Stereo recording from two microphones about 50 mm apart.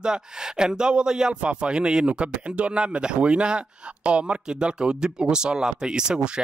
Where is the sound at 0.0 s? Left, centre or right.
Centre.